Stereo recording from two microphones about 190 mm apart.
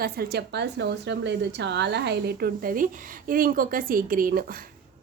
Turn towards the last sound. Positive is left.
turn(degrees=-45)  # may be behind; listen again after turning